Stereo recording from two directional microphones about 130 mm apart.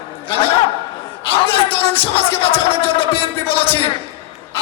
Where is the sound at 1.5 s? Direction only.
45° left (ahead or behind).